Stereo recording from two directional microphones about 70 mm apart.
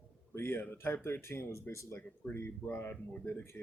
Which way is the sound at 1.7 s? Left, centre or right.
Left.